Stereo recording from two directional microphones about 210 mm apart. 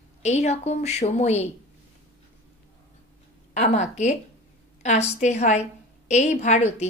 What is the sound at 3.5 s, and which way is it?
Speech, 35° left (ahead or behind).